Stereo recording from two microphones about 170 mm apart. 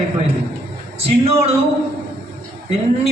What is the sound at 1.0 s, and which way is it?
Speech, 35° right (ahead or behind).